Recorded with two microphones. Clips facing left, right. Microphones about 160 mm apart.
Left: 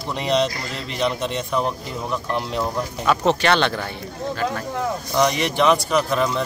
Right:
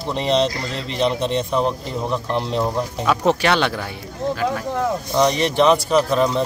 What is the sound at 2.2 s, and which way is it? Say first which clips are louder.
Speech: right 2 dB; 5° left (ahead or behind).